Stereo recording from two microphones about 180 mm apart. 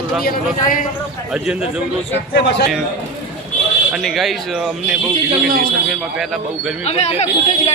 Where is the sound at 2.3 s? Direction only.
75° left (ahead or behind).